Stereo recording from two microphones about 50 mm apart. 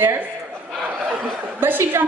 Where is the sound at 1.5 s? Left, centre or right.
Right.